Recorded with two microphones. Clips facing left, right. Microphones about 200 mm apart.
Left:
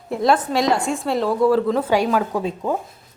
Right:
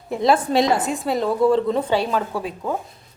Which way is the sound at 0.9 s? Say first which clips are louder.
Left 1 dB; centre (ahead or behind).